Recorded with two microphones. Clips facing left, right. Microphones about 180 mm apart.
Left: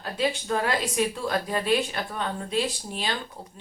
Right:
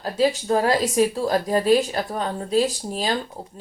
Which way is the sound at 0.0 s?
35° right (ahead or behind).